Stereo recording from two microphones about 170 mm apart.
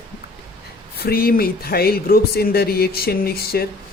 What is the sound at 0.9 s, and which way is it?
Speech, 65° left (ahead or behind).